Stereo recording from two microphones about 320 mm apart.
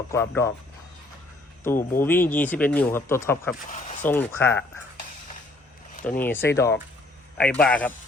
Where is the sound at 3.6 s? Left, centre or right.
Left.